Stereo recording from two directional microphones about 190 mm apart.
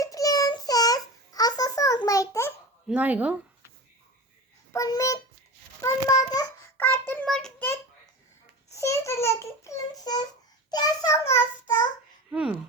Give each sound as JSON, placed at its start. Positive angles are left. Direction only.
{"t": 0.0, "sound": "child singing", "side_deg": 20}
{"t": 2.8, "sound": "speech", "side_deg": -5}
{"t": 4.7, "sound": "a child's voice", "side_deg": 15}
{"t": 5.8, "sound": "child singing", "side_deg": 15}
{"t": 12.3, "sound": "a sound", "side_deg": -5}